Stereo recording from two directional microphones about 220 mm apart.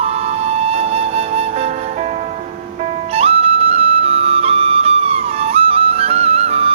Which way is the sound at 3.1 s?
25° right (ahead or behind).